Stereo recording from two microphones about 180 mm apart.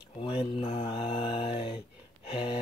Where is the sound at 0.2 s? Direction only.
30° left (ahead or behind).